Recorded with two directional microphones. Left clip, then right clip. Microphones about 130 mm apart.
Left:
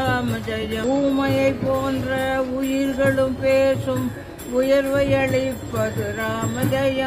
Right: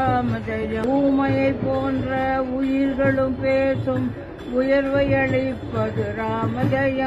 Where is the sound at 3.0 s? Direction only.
25° left (ahead or behind).